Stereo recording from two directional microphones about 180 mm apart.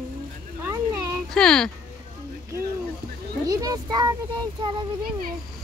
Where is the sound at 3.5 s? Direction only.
20° right (ahead or behind).